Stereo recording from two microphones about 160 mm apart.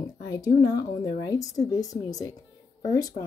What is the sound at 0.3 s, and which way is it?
Speech, 25° left (ahead or behind).